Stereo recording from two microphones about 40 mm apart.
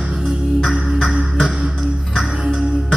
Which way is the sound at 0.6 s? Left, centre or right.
Centre.